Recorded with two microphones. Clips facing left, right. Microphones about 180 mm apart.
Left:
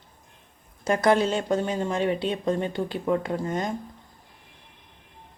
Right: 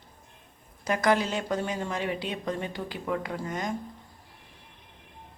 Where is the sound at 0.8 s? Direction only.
30° left (ahead or behind).